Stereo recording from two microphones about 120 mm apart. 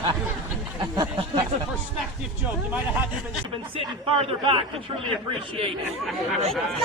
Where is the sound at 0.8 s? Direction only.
35° right (ahead or behind).